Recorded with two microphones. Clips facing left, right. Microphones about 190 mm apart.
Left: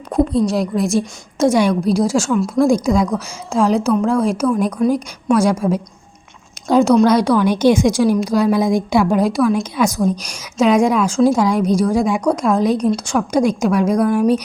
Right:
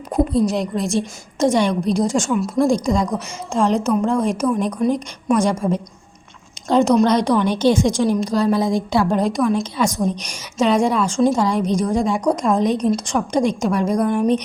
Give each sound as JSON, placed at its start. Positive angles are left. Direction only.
{"t": 0.1, "sound": "a woman's voice", "side_deg": -5}